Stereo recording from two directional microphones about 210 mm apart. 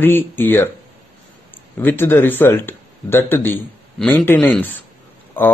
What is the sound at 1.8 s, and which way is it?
Speech, 10° left (ahead or behind).